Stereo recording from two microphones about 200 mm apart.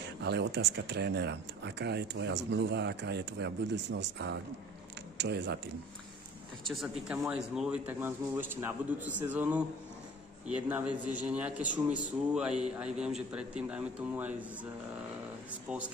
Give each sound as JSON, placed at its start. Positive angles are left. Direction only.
{"t": 0.2, "sound": "speech", "side_deg": -60}
{"t": 6.7, "sound": "a man's voice", "side_deg": 0}